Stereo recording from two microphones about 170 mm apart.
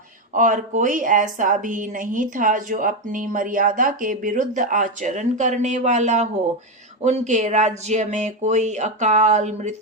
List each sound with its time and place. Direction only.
0.3 s a woman's voice: 50° right (ahead or behind)